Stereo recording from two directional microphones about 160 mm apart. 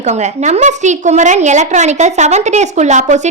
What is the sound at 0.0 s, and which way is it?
A woman's voice, 45° right (ahead or behind).